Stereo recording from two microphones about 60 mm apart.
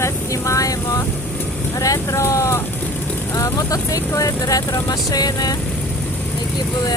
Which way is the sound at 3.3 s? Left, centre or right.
Left.